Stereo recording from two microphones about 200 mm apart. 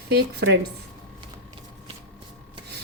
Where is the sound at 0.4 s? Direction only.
60° right (ahead or behind).